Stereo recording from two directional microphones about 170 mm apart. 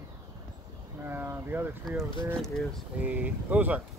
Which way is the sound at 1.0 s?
15° right (ahead or behind).